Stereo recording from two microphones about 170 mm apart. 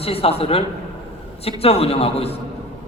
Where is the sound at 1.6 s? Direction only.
35° left (ahead or behind).